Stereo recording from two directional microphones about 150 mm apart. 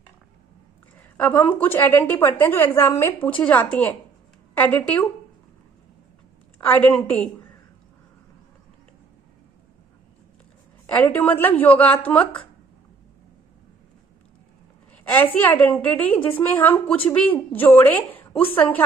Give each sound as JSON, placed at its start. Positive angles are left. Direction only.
{"t": 0.9, "sound": "a woman's voice", "side_deg": 10}
{"t": 6.7, "sound": "a woman's voice", "side_deg": 10}
{"t": 10.9, "sound": "a woman's voice", "side_deg": 10}
{"t": 14.9, "sound": "a woman's voice", "side_deg": 10}